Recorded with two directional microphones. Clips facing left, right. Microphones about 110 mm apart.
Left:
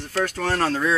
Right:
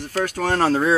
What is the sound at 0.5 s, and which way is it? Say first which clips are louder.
Speech: right 5 dB; 30° right (ahead or behind).